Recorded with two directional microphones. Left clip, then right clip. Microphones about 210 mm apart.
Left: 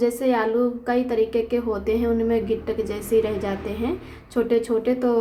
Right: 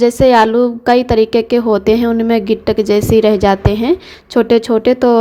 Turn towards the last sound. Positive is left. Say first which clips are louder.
# right 11 dB
turn(degrees=-40)  # may be behind; listen again after turning